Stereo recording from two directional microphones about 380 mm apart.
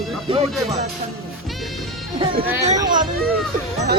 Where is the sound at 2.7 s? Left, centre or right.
Centre.